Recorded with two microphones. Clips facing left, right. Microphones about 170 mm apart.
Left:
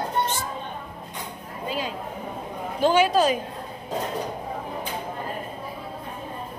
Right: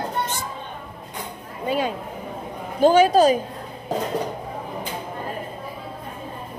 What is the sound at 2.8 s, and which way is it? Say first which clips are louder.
Speech: right 5 dB; 40° right (ahead or behind).